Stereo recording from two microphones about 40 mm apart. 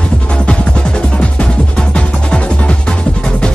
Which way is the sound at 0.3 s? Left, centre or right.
Left.